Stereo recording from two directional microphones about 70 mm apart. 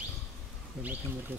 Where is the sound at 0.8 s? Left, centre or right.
Right.